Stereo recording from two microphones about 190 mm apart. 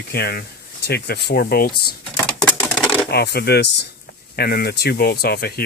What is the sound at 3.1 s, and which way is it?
Speech, 60° left (ahead or behind).